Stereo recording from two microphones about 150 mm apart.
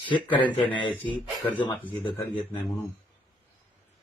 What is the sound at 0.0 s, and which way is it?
Speech, 30° left (ahead or behind).